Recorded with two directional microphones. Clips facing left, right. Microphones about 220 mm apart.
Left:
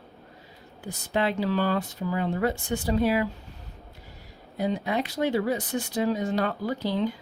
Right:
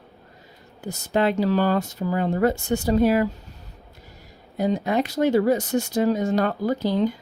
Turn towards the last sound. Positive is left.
turn(degrees=-45)  # may be behind; listen again after turning